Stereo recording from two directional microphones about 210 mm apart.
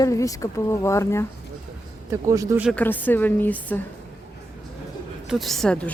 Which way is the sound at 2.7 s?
10° left (ahead or behind).